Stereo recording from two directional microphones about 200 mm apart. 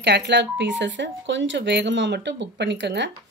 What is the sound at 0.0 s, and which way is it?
Speech, 60° right (ahead or behind).